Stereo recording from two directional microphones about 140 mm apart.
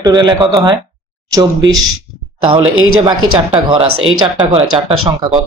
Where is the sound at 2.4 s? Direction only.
35° right (ahead or behind).